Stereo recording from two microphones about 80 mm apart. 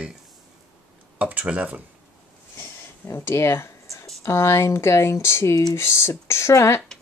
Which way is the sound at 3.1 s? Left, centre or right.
Left.